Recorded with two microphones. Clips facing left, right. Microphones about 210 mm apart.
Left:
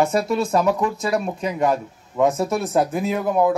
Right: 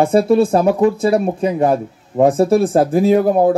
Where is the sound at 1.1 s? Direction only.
30° right (ahead or behind).